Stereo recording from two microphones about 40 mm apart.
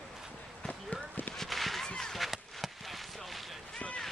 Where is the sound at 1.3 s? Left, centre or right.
Centre.